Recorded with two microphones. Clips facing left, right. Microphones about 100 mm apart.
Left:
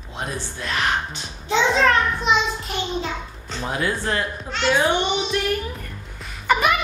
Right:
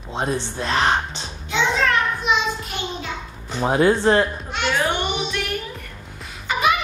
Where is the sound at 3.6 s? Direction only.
30° right (ahead or behind).